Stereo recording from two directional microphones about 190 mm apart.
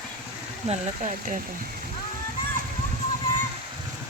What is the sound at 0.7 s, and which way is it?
Speech, 40° right (ahead or behind).